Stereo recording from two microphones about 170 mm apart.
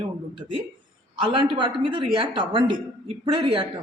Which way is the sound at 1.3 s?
30° right (ahead or behind).